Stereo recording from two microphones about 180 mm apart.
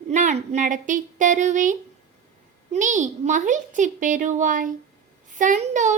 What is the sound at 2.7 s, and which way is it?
Speech, 45° right (ahead or behind).